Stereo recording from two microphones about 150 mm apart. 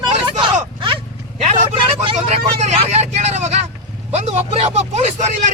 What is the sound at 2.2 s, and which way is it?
Vehicle, 45° right (ahead or behind).